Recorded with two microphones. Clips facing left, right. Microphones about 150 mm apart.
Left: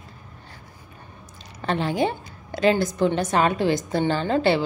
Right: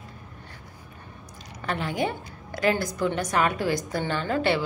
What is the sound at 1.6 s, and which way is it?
A woman's voice, 30° left (ahead or behind).